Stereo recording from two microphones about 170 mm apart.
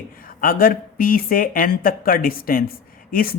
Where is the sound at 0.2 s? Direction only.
55° left (ahead or behind).